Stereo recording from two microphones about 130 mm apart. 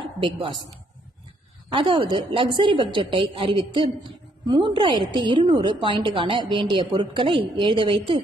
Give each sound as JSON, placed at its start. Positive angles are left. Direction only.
{"t": 1.7, "sound": "a woman's voice", "side_deg": -40}